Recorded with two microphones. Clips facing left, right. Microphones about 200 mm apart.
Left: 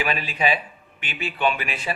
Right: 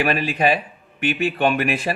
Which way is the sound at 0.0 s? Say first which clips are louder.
Right 5 dB; 55° right (ahead or behind).